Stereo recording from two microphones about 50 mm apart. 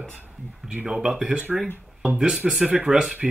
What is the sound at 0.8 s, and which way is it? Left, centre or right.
Speech, centre.